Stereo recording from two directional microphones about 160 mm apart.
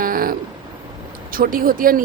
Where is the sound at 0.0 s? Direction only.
60° right (ahead or behind).